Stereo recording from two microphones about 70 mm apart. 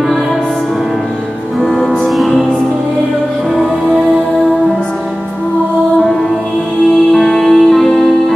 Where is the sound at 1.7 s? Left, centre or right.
Centre.